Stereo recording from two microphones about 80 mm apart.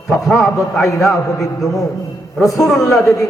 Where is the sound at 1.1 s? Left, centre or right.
Left.